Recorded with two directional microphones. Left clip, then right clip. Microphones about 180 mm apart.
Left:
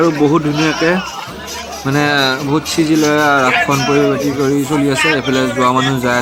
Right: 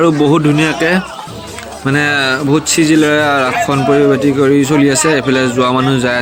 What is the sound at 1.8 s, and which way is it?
A man's voice, 10° right (ahead or behind).